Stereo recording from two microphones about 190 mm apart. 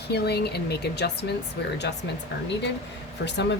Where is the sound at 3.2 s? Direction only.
65° left (ahead or behind).